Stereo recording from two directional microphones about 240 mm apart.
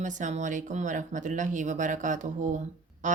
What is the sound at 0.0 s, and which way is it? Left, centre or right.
Speech, right.